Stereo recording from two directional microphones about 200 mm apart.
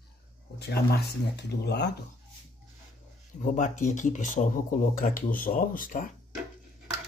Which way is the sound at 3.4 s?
40° left (ahead or behind).